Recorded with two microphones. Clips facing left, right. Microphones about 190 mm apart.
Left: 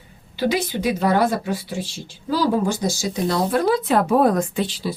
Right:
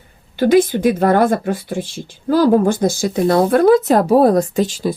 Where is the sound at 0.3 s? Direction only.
50° right (ahead or behind).